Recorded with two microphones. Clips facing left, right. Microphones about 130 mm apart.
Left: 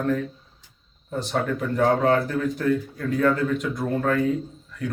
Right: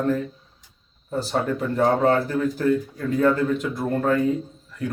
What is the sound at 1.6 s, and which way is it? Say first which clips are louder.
Speech: right 1 dB; 30° right (ahead or behind).